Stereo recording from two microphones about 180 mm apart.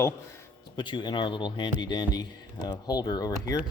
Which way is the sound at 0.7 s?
25° left (ahead or behind).